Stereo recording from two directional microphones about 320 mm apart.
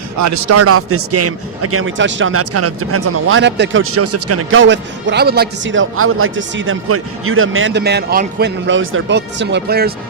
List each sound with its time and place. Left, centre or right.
0.2 s a man's voice: right